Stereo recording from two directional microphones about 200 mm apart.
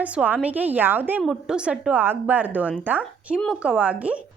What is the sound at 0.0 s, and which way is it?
A woman's voice, 5° right (ahead or behind).